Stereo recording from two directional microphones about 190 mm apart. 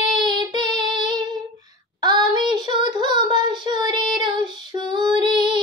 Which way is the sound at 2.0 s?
20° right (ahead or behind).